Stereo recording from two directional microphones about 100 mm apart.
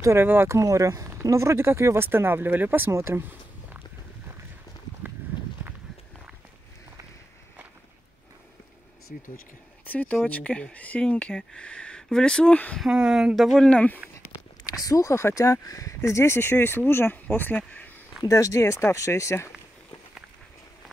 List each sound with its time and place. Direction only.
0.0 s speech: 25° right (ahead or behind)
9.8 s speech: 15° left (ahead or behind)
12.9 s speech: 5° right (ahead or behind)
13.7 s speech: 15° left (ahead or behind)
14.7 s speech: 35° left (ahead or behind); by 17.9 s 15° left (ahead or behind)
18.2 s speech: 35° left (ahead or behind)